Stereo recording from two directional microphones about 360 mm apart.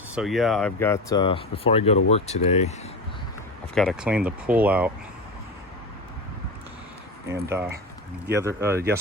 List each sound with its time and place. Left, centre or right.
0.1 s speech: centre
3.8 s speech: centre
7.4 s speech: centre